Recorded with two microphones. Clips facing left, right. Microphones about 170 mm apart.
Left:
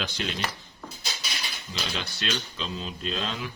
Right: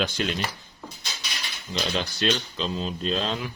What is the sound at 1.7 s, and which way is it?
Speech, 35° right (ahead or behind).